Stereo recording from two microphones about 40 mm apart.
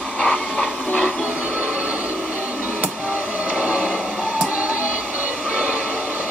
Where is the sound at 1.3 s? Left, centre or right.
Right.